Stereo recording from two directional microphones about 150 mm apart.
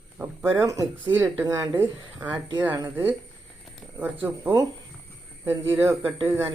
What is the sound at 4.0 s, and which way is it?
Speech, 15° right (ahead or behind).